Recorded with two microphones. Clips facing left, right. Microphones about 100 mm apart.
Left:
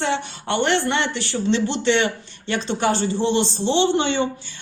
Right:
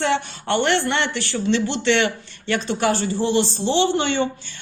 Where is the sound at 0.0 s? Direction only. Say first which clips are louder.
Right 2 dB; 15° left (ahead or behind).